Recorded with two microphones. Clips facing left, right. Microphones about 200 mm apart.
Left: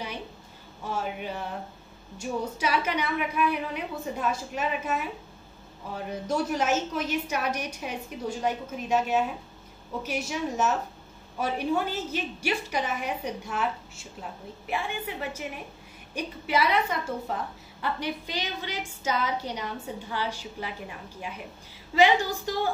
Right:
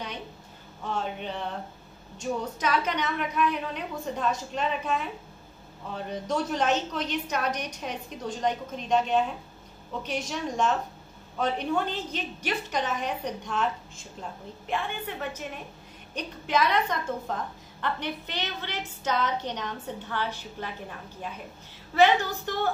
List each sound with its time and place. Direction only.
0.8 s a woman's voice: 5° left (ahead or behind)